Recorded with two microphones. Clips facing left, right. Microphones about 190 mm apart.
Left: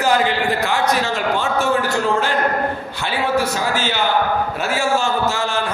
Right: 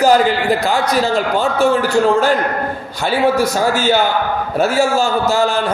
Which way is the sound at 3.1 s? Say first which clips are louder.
Right 5 dB; 45° right (ahead or behind).